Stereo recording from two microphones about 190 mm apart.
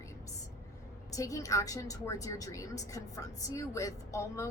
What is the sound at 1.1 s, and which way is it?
A woman's voice, 15° left (ahead or behind).